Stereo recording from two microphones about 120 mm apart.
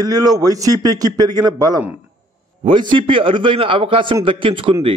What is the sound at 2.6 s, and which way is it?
A man's voice, 45° right (ahead or behind).